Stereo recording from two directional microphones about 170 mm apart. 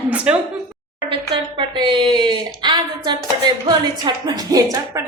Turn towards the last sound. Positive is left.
turn(degrees=-20)  # may be behind; listen again after turning